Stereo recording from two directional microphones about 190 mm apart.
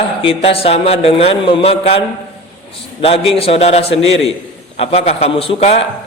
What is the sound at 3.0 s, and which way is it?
A man's voice, 30° left (ahead or behind).